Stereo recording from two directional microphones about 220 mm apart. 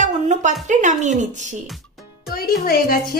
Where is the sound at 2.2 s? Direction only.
45° left (ahead or behind).